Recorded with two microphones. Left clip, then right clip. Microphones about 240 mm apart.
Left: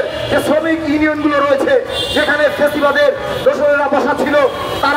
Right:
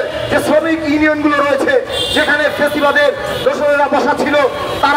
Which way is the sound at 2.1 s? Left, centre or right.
Centre.